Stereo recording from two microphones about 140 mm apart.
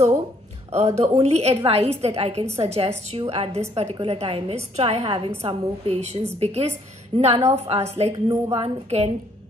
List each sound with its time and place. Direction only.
0.7 s a woman's voice: 50° right (ahead or behind)
7.1 s a woman's voice: 30° right (ahead or behind)
7.4 s a woman's voice: 50° right (ahead or behind)